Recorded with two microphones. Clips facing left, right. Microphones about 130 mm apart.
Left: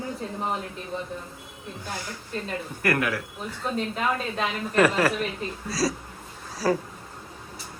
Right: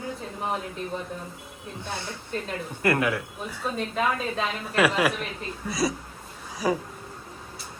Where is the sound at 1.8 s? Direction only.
25° right (ahead or behind).